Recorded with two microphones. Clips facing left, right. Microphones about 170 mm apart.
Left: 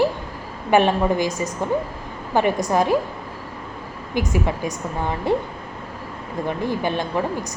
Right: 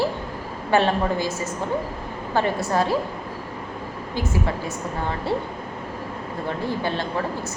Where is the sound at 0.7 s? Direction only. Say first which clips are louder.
Left 3 dB; 15° left (ahead or behind).